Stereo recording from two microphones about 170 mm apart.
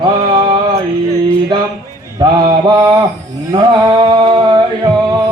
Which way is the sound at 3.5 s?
25° right (ahead or behind).